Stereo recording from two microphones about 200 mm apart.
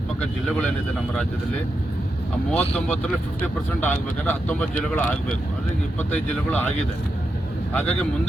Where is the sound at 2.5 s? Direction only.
5° left (ahead or behind).